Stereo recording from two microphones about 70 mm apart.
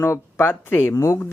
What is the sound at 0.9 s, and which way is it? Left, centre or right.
Speech, left.